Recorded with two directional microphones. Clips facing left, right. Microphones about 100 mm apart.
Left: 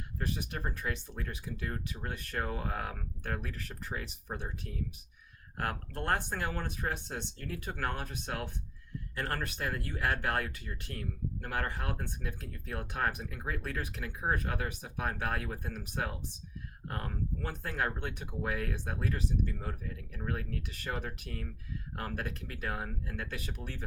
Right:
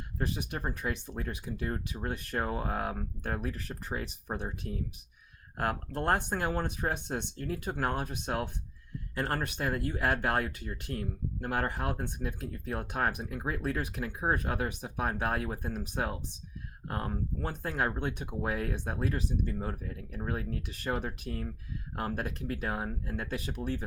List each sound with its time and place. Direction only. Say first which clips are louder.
0.6 s speech: right 3 dB; 30° right (ahead or behind)
5.5 s speech: right 4 dB; 25° right (ahead or behind)